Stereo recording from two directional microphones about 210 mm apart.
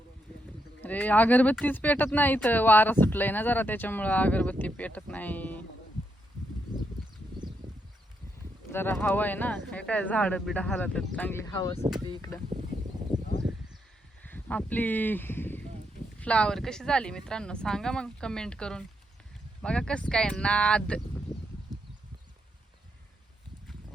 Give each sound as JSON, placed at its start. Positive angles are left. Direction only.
{"t": 0.8, "sound": "speech", "side_deg": 10}
{"t": 8.7, "sound": "speech", "side_deg": 10}
{"t": 11.5, "sound": "speech", "side_deg": 20}
{"t": 14.3, "sound": "speech", "side_deg": 10}